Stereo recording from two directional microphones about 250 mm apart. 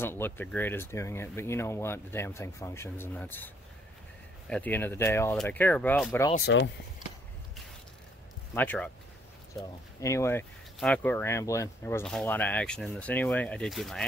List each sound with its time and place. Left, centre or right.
0.0 s speech: centre
6.3 s speech: left
8.5 s speech: centre
9.9 s speech: centre